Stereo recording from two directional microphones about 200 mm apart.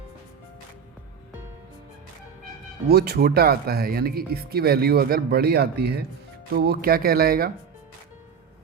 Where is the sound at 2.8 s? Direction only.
50° right (ahead or behind).